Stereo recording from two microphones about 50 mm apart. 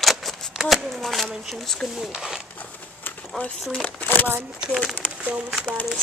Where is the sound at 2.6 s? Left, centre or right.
Left.